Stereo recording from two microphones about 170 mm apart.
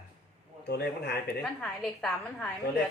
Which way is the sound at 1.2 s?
5° left (ahead or behind).